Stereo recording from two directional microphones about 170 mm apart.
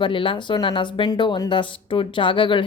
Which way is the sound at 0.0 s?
30° left (ahead or behind).